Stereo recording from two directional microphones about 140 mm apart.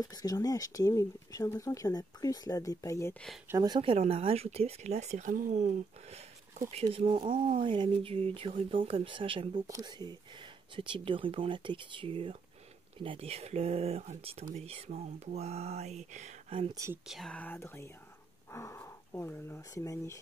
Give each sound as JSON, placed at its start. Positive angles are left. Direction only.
{"t": 0.0, "sound": "speech", "side_deg": 25}
{"t": 3.4, "sound": "speech", "side_deg": -25}
{"t": 9.7, "sound": "speech", "side_deg": -25}
{"t": 16.4, "sound": "speech", "side_deg": -40}
{"t": 16.7, "sound": "speech", "side_deg": -20}
{"t": 17.1, "sound": "speech", "side_deg": 5}